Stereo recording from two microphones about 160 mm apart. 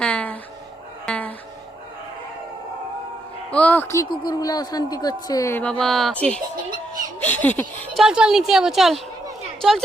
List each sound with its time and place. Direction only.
0.0 s a sound: 10° left (ahead or behind)
1.0 s music: 10° left (ahead or behind)
3.5 s speech: 10° left (ahead or behind)
4.1 s speech: 25° left (ahead or behind); by 7.9 s 10° left (ahead or behind)
7.9 s a woman's voice: 5° right (ahead or behind)